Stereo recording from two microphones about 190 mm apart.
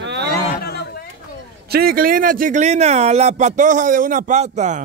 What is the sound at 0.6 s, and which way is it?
Chatter, 55° left (ahead or behind).